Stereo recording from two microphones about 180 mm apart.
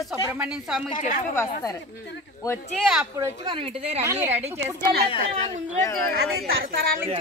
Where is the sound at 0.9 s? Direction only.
45° left (ahead or behind).